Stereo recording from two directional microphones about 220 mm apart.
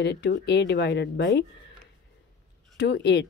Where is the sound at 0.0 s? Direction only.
50° left (ahead or behind).